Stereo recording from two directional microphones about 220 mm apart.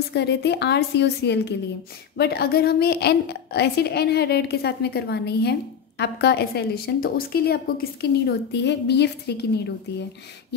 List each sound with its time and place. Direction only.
0.1 s a woman's voice: 50° left (ahead or behind)